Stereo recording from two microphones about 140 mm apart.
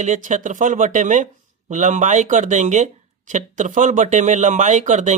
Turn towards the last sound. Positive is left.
turn(degrees=-60)  # may be behind; listen again after turning